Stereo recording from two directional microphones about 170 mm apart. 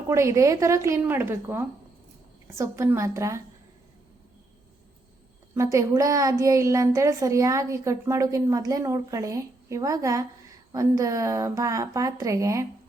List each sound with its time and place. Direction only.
0.1 s a woman's voice: 15° right (ahead or behind)
5.5 s a woman's voice: 20° right (ahead or behind)